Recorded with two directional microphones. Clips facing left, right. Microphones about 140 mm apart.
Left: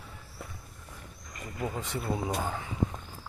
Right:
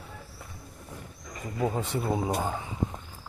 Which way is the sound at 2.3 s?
15° right (ahead or behind).